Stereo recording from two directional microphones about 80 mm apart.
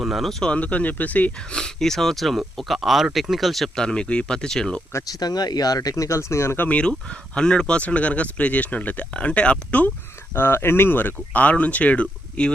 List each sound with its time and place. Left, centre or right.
0.0 s speech: centre
0.5 s speech: centre
5.0 s speech: left
6.7 s speech: centre
10.3 s speech: left